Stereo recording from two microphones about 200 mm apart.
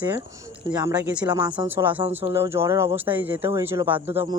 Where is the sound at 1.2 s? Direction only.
20° right (ahead or behind).